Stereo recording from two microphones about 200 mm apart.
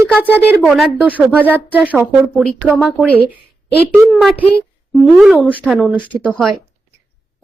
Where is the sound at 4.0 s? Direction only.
Centre (ahead or behind).